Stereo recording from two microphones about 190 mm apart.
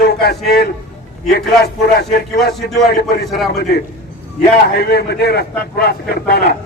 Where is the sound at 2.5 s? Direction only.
Centre (ahead or behind).